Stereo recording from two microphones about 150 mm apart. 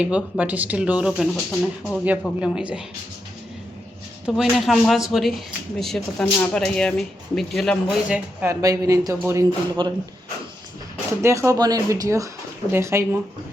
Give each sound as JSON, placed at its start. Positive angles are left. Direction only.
{"t": 0.0, "sound": "speech", "side_deg": -5}
{"t": 4.4, "sound": "speech", "side_deg": 0}
{"t": 8.1, "sound": "speech", "side_deg": -10}
{"t": 8.6, "sound": "speech", "side_deg": -20}
{"t": 9.5, "sound": "speech", "side_deg": -30}
{"t": 11.2, "sound": "speech", "side_deg": -20}